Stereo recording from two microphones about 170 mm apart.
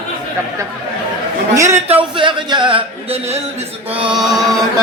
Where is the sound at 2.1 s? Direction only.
30° right (ahead or behind).